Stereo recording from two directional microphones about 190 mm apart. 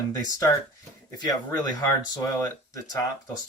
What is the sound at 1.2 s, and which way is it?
Speech, 20° left (ahead or behind).